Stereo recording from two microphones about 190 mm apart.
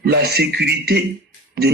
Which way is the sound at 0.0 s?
55° right (ahead or behind).